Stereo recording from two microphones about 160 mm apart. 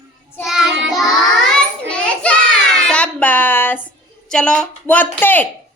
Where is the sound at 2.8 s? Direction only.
5° left (ahead or behind).